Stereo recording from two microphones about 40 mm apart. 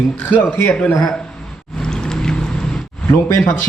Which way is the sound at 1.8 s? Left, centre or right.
Centre.